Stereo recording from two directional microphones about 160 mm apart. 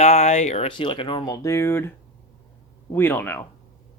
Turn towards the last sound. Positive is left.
turn(degrees=10)  # may be behind; listen again after turning